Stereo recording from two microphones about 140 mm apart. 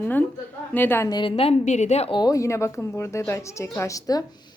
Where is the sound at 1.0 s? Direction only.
35° left (ahead or behind); by 2.1 s 50° left (ahead or behind).